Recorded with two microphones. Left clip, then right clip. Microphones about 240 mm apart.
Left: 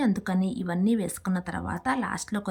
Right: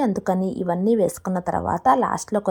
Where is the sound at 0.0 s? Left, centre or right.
Centre.